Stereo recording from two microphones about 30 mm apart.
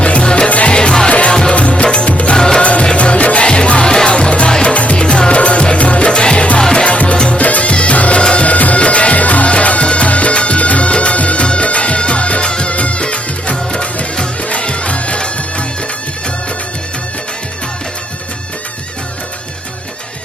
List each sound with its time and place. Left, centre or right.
0.0 s music: left
0.4 s music: left
0.7 s music: left
2.0 s music: left
2.3 s music: left
2.6 s music: left
3.4 s music: left
4.7 s music: left
6.1 s music: left
8.2 s music: left
8.4 s music: left
8.8 s music: left
9.5 s music: left